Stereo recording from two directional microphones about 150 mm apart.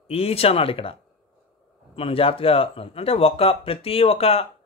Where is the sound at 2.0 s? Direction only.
40° left (ahead or behind).